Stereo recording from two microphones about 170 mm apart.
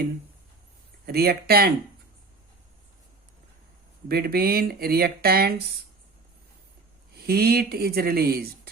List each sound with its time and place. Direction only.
1.0 s speech: 65° right (ahead or behind)
4.1 s speech: 65° right (ahead or behind)
7.3 s speech: 65° right (ahead or behind)